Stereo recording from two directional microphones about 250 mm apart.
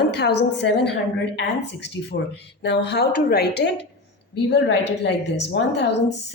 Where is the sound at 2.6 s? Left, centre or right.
Left.